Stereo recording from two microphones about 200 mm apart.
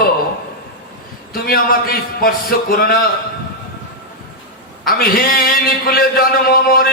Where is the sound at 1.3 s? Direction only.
45° left (ahead or behind).